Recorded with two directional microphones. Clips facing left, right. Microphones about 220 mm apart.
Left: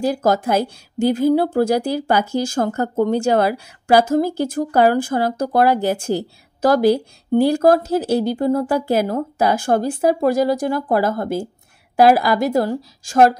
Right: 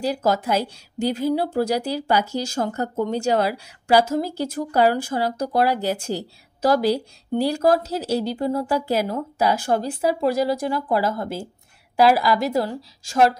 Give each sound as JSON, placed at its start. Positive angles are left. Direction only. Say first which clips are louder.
{"t": 0.0, "sound": "a woman's voice", "louder": "left 4 dB", "side_deg": 50}